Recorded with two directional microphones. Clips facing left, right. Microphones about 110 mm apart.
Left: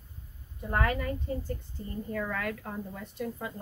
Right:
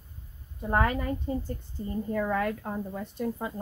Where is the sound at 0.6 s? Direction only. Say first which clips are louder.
Right 3 dB; 30° right (ahead or behind).